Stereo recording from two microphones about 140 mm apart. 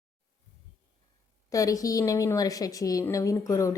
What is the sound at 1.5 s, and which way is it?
A woman's voice, 25° left (ahead or behind).